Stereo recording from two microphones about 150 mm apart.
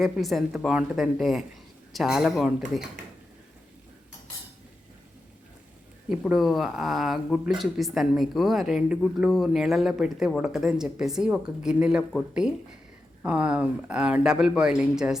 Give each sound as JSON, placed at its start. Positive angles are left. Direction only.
{"t": 0.0, "sound": "speech", "side_deg": 0}
{"t": 6.1, "sound": "speech", "side_deg": 0}